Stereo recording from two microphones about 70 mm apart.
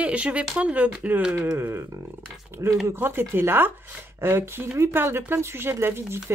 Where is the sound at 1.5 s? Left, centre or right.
Right.